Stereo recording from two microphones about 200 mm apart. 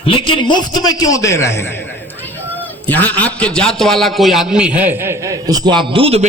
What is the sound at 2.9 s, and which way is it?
A man's voice, 10° left (ahead or behind).